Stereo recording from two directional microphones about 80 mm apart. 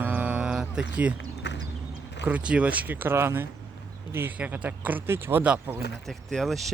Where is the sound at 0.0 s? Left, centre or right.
Centre.